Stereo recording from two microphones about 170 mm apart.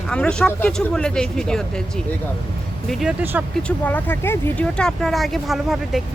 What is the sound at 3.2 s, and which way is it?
Speech, 10° right (ahead or behind).